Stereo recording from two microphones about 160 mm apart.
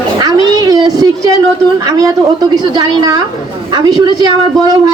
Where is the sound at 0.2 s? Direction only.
25° right (ahead or behind).